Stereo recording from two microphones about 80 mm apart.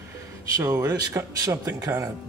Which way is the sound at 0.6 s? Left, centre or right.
Right.